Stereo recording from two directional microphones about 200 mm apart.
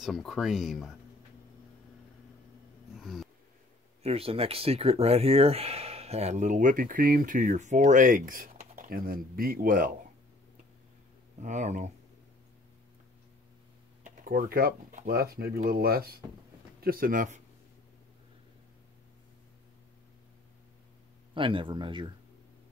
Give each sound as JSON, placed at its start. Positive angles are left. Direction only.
{"t": 0.0, "sound": "speech", "side_deg": 0}
{"t": 3.0, "sound": "a sound", "side_deg": 0}
{"t": 4.0, "sound": "speech", "side_deg": -30}
{"t": 11.4, "sound": "speech", "side_deg": -35}
{"t": 14.0, "sound": "speech", "side_deg": -45}
{"t": 21.4, "sound": "speech", "side_deg": -25}